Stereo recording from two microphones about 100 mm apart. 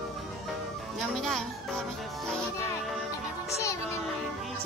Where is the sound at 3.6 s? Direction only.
30° left (ahead or behind).